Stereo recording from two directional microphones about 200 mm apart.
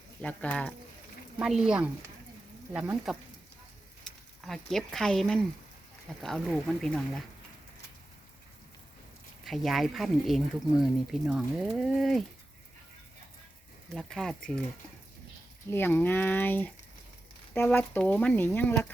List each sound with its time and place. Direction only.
0.2 s speech: 5° left (ahead or behind)
9.4 s speech: centre (ahead or behind)
13.9 s speech: centre (ahead or behind)
15.7 s speech: 10° left (ahead or behind)